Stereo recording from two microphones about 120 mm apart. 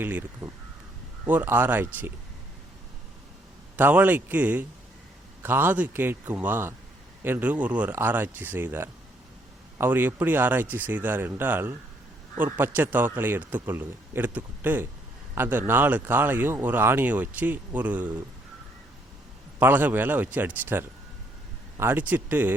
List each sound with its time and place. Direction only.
0.0 s speech: 15° right (ahead or behind)
3.8 s speech: 15° right (ahead or behind)
19.5 s speech: 15° right (ahead or behind)